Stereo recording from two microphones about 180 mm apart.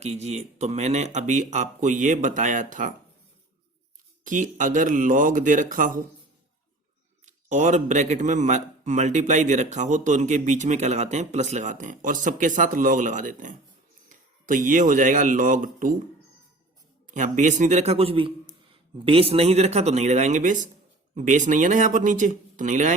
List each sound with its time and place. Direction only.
0.0 s a man's voice: 35° right (ahead or behind)
4.2 s speech: 45° right (ahead or behind)
7.3 s a man's voice: 40° right (ahead or behind)
17.1 s a man's voice: 45° right (ahead or behind)